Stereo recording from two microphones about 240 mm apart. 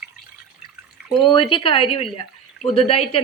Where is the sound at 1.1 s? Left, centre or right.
Left.